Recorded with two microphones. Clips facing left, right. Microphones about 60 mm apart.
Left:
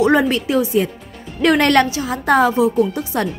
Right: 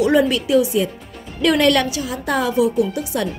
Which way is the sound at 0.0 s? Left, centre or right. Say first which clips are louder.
Left 1 dB; left.